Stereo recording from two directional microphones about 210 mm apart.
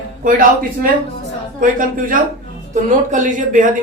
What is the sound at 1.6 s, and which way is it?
Speech, 40° right (ahead or behind).